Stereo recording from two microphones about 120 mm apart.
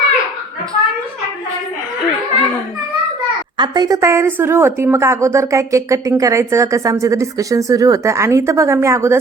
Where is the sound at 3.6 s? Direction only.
35° right (ahead or behind).